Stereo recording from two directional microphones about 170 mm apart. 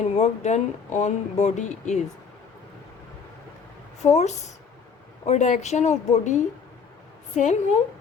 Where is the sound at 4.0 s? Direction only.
45° left (ahead or behind).